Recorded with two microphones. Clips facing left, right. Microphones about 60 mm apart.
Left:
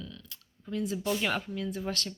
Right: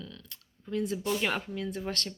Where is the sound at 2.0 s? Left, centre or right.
Right.